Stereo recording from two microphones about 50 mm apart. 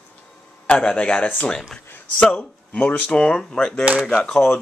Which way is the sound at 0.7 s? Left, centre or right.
Centre.